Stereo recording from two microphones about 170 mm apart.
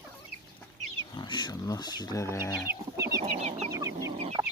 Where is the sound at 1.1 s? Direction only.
25° left (ahead or behind).